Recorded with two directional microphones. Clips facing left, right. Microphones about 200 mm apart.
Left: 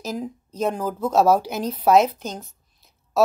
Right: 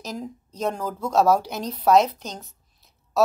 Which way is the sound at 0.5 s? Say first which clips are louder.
Left 3 dB; 5° left (ahead or behind).